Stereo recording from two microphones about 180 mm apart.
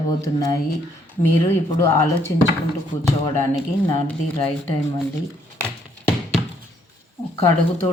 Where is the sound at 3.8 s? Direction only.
5° left (ahead or behind).